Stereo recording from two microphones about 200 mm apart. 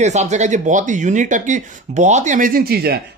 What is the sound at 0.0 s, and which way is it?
Speech, 35° right (ahead or behind).